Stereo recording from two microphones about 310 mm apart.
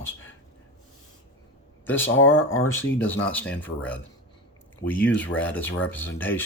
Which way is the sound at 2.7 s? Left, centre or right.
Centre.